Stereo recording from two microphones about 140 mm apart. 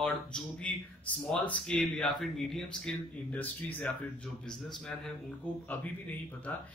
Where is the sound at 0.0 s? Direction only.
5° left (ahead or behind).